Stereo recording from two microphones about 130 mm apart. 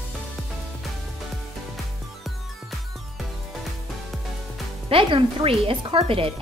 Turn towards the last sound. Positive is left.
turn(degrees=-45)  # may be behind; listen again after turning